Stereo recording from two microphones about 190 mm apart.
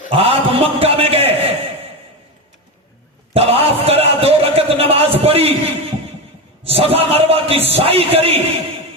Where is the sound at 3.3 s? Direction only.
30° right (ahead or behind).